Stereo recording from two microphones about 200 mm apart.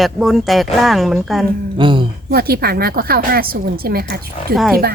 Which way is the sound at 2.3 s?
50° right (ahead or behind).